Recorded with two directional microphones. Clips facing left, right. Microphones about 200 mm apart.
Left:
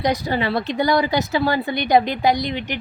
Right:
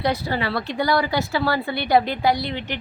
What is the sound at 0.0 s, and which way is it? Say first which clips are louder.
Speech: left 2 dB; 20° left (ahead or behind).